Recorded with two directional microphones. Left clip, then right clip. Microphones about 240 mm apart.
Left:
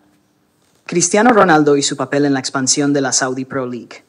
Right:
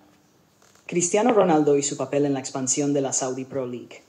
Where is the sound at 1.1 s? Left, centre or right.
Left.